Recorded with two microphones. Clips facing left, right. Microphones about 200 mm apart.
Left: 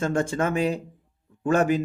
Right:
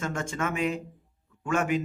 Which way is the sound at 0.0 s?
35° left (ahead or behind).